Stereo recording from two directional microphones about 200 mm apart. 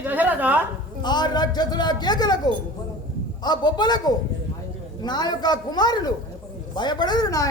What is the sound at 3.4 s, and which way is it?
A man's voice, 20° left (ahead or behind).